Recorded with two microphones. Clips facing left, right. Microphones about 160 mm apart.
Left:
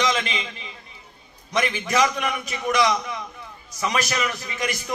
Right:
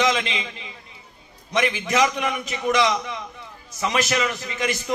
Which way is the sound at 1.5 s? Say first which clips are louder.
Right 1 dB; 20° right (ahead or behind).